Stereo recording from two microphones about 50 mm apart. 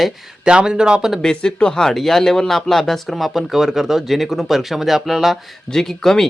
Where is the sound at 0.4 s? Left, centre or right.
Centre.